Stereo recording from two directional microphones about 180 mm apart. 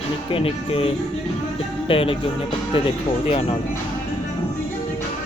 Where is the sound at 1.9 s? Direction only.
30° left (ahead or behind).